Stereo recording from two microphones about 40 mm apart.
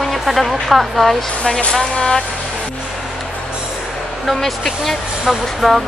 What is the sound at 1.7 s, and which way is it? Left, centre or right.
Speech, centre.